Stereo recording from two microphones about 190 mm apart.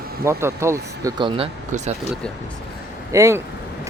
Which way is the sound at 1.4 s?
35° right (ahead or behind).